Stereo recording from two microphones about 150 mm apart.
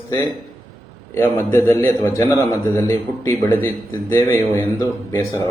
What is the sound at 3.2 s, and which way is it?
A man's voice, 15° left (ahead or behind).